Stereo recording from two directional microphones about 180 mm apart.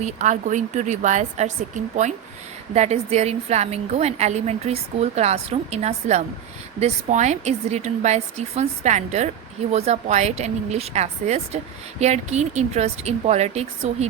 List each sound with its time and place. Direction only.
0.0 s a woman's voice: 45° right (ahead or behind)